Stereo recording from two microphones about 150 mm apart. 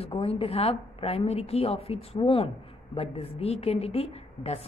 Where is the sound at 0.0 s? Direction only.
40° left (ahead or behind).